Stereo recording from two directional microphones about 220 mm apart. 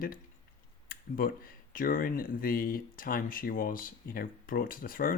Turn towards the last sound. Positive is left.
turn(degrees=40)  # may be behind; listen again after turning